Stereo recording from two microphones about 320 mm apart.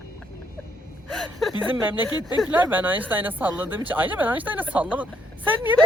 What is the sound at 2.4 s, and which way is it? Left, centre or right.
Speech, centre.